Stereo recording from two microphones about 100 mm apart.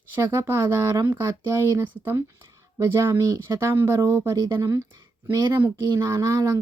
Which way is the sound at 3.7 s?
30° right (ahead or behind).